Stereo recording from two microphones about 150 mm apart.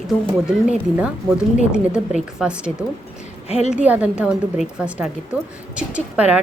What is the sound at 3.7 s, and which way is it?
A woman's voice, 10° right (ahead or behind).